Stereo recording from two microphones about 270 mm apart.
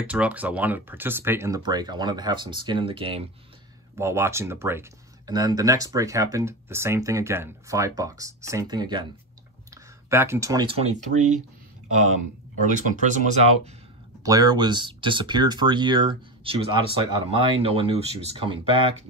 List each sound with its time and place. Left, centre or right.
0.0 s speech: centre
10.0 s speech: centre
12.6 s speech: right
14.2 s speech: centre